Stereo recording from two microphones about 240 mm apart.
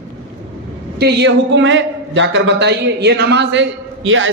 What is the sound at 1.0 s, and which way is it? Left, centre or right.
A man's voice, right.